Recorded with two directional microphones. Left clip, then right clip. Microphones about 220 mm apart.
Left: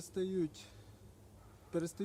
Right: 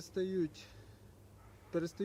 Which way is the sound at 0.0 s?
25° left (ahead or behind).